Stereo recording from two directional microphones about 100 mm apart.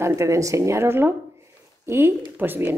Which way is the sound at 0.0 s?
30° right (ahead or behind).